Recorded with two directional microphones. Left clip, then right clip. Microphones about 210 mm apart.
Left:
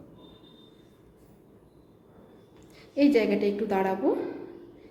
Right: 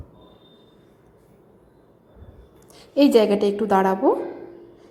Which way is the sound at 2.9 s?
30° right (ahead or behind).